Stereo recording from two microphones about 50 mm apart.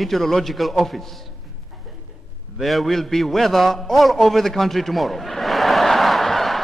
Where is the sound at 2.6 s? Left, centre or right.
Centre.